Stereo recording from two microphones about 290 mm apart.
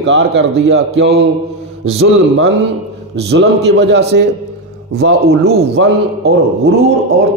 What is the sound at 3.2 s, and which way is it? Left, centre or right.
A man's voice, right.